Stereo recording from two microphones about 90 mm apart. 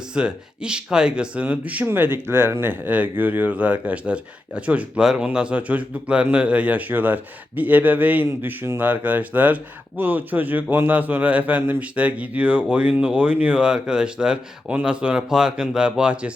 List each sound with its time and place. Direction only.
0.1 s a man's voice: 10° right (ahead or behind)